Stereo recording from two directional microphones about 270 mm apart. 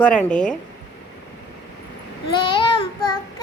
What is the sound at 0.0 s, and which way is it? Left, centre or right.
Speech, centre.